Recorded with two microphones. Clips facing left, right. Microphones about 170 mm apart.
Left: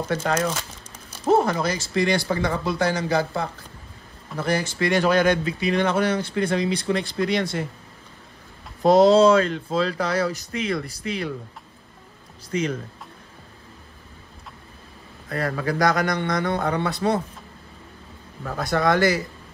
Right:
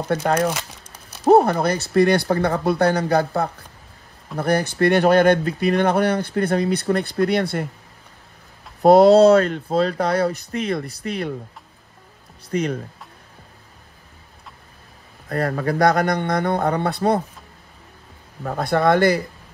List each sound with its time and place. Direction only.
0.1 s speech: 55° right (ahead or behind)
8.8 s speech: 60° right (ahead or behind)
12.5 s speech: 45° right (ahead or behind)
15.2 s speech: 55° right (ahead or behind)
18.4 s speech: 55° right (ahead or behind)